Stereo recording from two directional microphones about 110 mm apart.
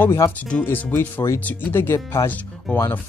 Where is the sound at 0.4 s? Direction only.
15° left (ahead or behind).